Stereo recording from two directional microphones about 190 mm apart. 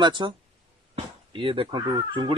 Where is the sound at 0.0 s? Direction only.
25° right (ahead or behind).